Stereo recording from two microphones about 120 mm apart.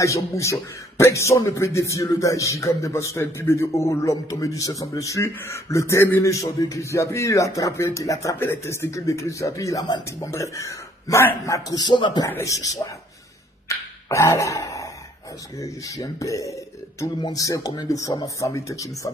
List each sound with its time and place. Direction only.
0.0 s a man's voice: 25° left (ahead or behind)
12.3 s a man's voice: 25° left (ahead or behind)
13.7 s a sound: 25° left (ahead or behind)
15.5 s a man's voice: 30° left (ahead or behind)